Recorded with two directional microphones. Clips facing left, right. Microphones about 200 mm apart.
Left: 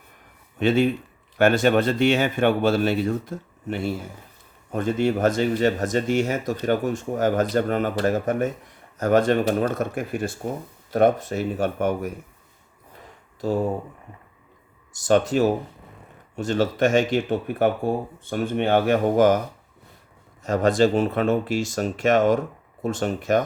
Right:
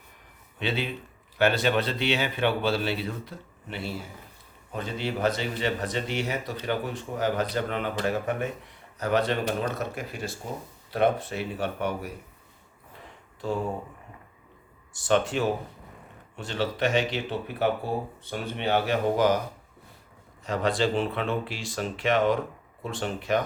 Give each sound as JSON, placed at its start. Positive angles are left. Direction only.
{"t": 0.6, "sound": "speech", "side_deg": 45}
{"t": 13.4, "sound": "speech", "side_deg": 40}
{"t": 14.9, "sound": "speech", "side_deg": 40}
{"t": 20.4, "sound": "speech", "side_deg": 45}